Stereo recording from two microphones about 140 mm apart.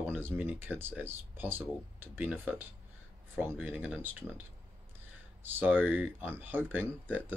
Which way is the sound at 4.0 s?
15° right (ahead or behind).